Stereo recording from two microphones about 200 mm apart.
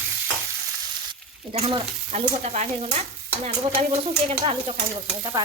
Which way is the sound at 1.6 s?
30° right (ahead or behind).